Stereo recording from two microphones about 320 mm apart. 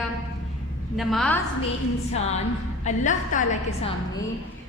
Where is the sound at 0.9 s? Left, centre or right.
Centre.